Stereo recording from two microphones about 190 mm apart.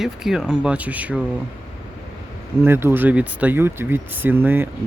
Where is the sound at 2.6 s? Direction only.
10° right (ahead or behind).